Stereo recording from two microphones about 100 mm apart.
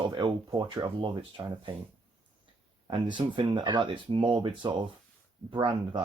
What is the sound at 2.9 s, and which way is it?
Speech, 55° right (ahead or behind).